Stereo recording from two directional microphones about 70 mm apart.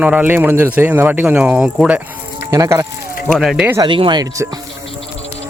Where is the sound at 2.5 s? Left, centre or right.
Right.